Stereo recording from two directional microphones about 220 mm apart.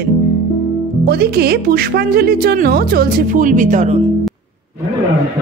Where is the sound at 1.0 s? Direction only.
45° right (ahead or behind).